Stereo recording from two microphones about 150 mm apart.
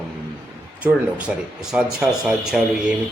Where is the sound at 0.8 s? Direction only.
10° right (ahead or behind).